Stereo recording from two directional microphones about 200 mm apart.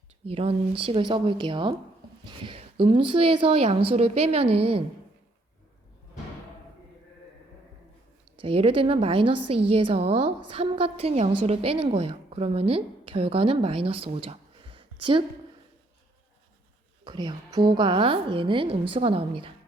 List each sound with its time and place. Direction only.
0.3 s a woman's voice: 30° right (ahead or behind)
8.4 s a woman's voice: 30° right (ahead or behind)
17.0 s a woman's voice: 20° right (ahead or behind)